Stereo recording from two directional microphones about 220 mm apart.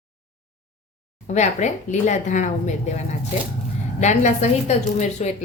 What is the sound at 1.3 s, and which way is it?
A woman's voice, 30° left (ahead or behind).